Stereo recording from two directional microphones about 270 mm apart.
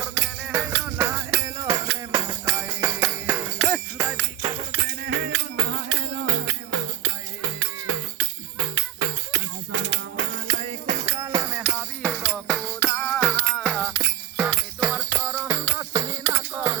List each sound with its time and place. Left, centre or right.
0.0 s music: centre
4.8 s music: right
10.4 s music: right
11.0 s music: centre